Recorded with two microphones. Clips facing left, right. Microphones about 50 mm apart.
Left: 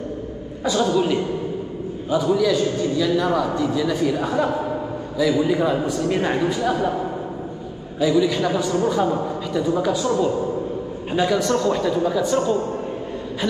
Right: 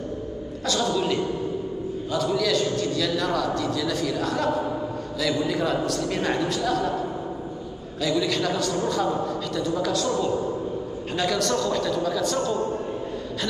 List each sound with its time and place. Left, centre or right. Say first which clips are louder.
0.7 s a man's voice: left 5 dB; centre
8.0 s a man's voice: left 6 dB; centre